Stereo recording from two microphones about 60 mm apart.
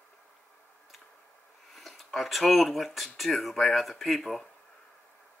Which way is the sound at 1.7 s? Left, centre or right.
Centre.